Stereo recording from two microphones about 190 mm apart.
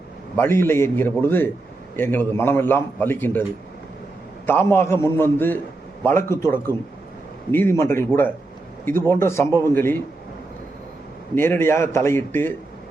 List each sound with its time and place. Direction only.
0.3 s a man's voice: 10° left (ahead or behind)
4.4 s a man's voice: 10° left (ahead or behind)
11.3 s a man's voice: 10° left (ahead or behind)